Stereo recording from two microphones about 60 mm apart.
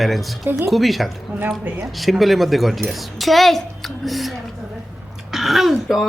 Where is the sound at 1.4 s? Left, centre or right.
Right.